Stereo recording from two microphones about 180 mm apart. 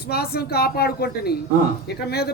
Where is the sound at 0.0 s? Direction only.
60° left (ahead or behind).